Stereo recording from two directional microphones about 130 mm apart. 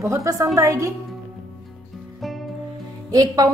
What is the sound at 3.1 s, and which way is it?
Music, 30° right (ahead or behind).